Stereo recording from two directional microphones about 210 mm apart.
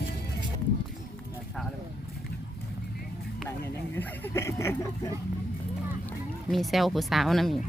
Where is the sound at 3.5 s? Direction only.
10° left (ahead or behind).